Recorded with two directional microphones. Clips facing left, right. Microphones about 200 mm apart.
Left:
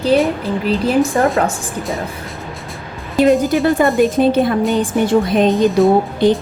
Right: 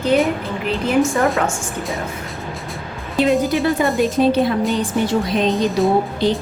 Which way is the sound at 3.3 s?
Centre (ahead or behind).